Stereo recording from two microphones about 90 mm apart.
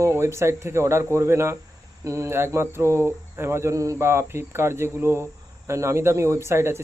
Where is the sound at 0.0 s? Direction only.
30° right (ahead or behind).